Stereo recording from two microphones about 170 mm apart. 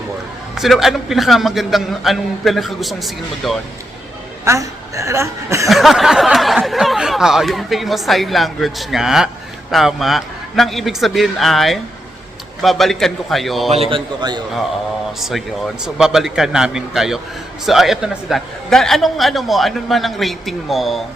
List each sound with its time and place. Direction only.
0.5 s speech: centre (ahead or behind)
4.4 s a woman's voice: 20° right (ahead or behind)
5.6 s speech: centre (ahead or behind)
13.9 s a man's voice: 25° right (ahead or behind)
15.2 s speech: centre (ahead or behind)